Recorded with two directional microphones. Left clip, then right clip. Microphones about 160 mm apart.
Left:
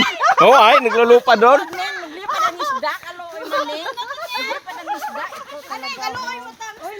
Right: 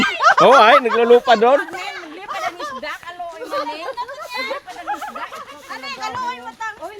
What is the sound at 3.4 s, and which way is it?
Chatter, 15° left (ahead or behind).